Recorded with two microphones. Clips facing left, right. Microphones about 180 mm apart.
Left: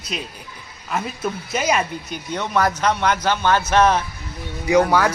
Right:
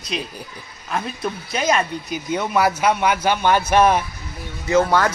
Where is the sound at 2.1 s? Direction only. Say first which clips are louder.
Right 2 dB; 10° right (ahead or behind).